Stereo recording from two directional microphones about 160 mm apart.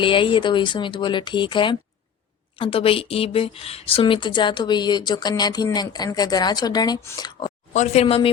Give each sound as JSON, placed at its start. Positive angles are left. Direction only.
{"t": 0.0, "sound": "speech", "side_deg": 30}
{"t": 7.7, "sound": "speech", "side_deg": 45}
{"t": 8.0, "sound": "speech", "side_deg": 35}